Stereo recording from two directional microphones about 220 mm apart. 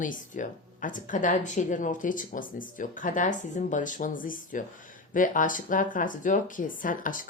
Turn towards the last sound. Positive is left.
turn(degrees=35)  # may be behind; listen again after turning